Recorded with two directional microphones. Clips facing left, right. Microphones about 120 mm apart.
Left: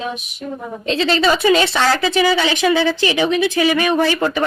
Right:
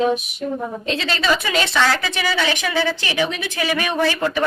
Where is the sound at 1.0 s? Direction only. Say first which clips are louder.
Left 7 dB; 30° left (ahead or behind).